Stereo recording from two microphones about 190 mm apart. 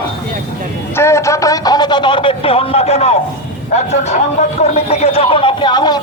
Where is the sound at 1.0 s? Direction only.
15° left (ahead or behind).